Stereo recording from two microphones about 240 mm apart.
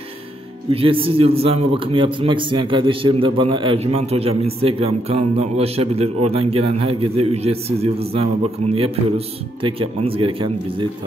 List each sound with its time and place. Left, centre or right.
0.7 s a man's voice: right